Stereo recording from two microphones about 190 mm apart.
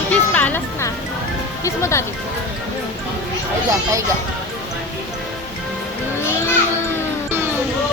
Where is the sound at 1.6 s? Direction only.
15° left (ahead or behind).